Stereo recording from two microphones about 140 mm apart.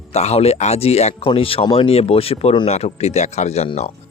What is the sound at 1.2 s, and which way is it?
Speech, 40° left (ahead or behind).